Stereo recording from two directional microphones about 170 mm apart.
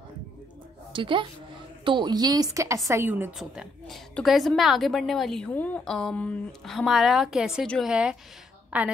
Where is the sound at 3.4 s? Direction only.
Centre (ahead or behind).